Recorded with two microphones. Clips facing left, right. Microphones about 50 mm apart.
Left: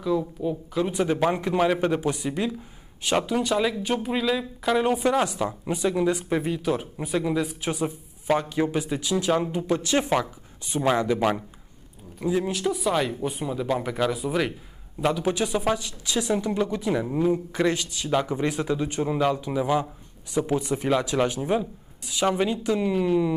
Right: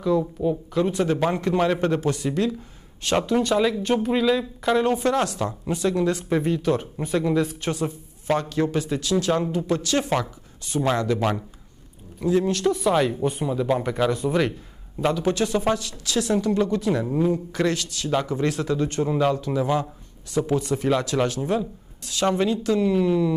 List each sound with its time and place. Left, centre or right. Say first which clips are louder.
0.4 s speech: right 3 dB; centre
10.0 s speech: even; centre